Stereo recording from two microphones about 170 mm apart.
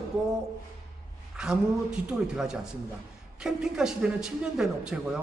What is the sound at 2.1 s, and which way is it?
A man's voice, 5° right (ahead or behind).